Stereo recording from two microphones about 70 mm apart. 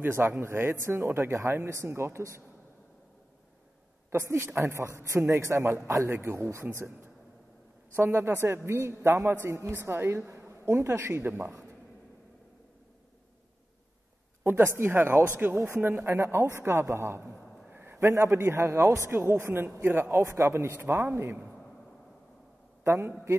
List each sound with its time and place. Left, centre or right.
0.0 s speech: right
4.1 s speech: right
14.4 s a man's voice: right
20.2 s speech: right
22.8 s speech: right